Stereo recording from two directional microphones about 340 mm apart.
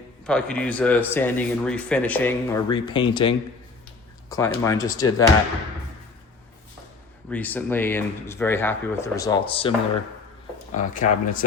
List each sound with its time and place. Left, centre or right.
0.3 s speech: centre
7.3 s speech: centre
10.8 s speech: left